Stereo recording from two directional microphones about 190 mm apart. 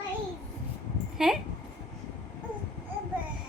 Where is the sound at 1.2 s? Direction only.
5° right (ahead or behind).